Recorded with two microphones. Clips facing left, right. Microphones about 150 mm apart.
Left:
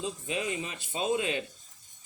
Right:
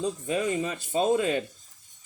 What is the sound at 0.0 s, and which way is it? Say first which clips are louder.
Speech: right 6 dB; 45° right (ahead or behind).